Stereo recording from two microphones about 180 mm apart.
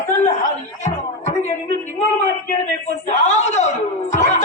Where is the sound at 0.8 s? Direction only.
40° left (ahead or behind).